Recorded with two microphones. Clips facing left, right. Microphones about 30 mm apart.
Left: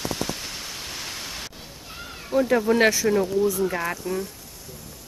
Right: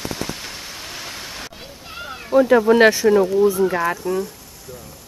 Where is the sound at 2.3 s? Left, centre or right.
Right.